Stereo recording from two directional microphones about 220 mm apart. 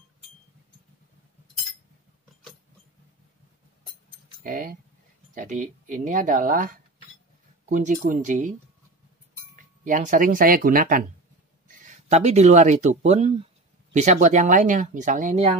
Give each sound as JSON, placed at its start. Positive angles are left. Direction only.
{"t": 4.4, "sound": "speech", "side_deg": -40}
{"t": 9.8, "sound": "speech", "side_deg": -35}